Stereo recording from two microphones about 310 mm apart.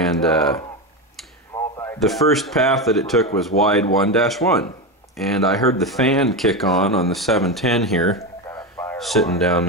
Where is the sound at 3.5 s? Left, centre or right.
Left.